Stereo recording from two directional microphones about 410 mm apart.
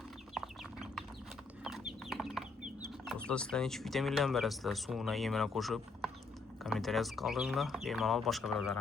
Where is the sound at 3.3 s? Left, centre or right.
Centre.